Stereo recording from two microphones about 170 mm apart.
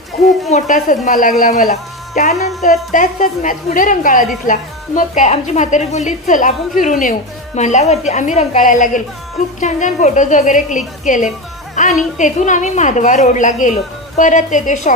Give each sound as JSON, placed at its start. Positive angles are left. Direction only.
{"t": 0.5, "sound": "a woman's voice", "side_deg": 45}